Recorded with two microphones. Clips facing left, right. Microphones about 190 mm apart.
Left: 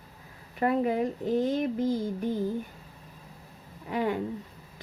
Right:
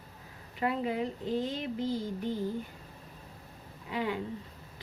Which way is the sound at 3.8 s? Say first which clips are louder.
Left 5 dB; 45° left (ahead or behind).